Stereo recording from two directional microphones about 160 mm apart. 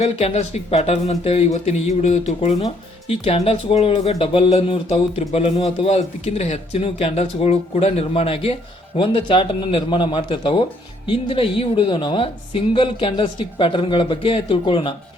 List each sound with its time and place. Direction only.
0.0 s speech: 40° left (ahead or behind)